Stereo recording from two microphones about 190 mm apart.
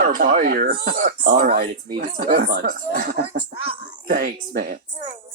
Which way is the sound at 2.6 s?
40° right (ahead or behind).